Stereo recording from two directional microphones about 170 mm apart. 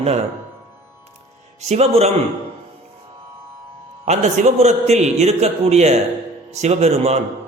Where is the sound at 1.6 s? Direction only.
40° right (ahead or behind).